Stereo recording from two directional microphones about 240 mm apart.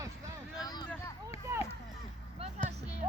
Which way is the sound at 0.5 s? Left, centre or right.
Centre.